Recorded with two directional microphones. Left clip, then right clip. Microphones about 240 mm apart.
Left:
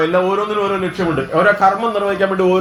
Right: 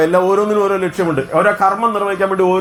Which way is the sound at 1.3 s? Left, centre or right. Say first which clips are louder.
Left 1 dB; right.